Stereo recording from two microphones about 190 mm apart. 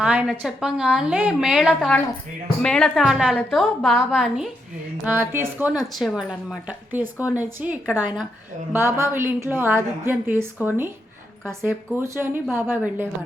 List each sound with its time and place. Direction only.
0.0 s a woman's voice: 5° right (ahead or behind)